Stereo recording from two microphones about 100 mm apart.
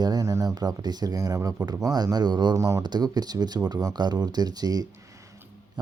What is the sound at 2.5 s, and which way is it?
Speech, 30° right (ahead or behind).